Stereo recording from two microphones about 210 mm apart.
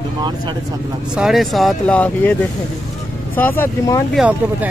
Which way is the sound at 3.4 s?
10° left (ahead or behind).